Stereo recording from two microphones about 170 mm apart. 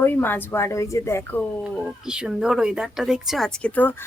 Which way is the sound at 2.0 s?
5° right (ahead or behind).